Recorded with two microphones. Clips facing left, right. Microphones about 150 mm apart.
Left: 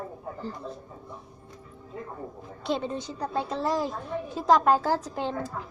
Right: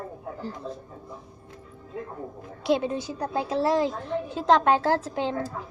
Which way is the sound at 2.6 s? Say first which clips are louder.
Right 5 dB; 5° right (ahead or behind).